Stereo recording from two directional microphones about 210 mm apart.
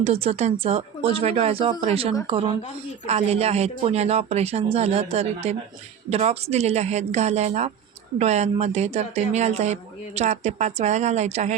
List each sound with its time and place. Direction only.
0.0 s speech: 30° right (ahead or behind)